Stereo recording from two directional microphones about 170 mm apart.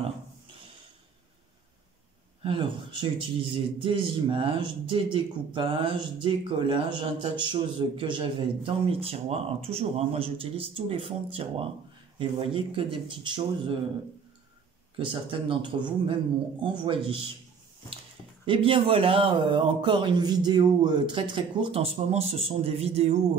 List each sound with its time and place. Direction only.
2.4 s a man's voice: 30° right (ahead or behind)
15.0 s a man's voice: 30° right (ahead or behind)
18.4 s speech: 30° right (ahead or behind)